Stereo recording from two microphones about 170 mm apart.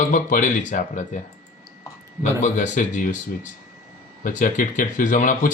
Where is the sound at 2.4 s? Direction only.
45° left (ahead or behind).